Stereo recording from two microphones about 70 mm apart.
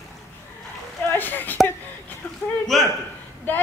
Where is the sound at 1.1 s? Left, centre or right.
Left.